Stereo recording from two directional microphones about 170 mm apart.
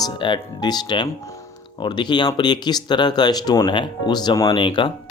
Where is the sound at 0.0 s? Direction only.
25° left (ahead or behind).